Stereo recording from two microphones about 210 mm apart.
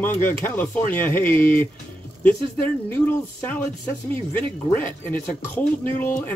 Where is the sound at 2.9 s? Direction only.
10° left (ahead or behind).